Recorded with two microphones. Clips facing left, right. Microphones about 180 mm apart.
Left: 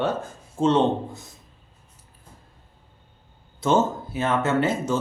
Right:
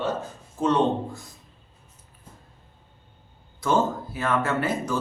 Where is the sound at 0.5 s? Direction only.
25° left (ahead or behind).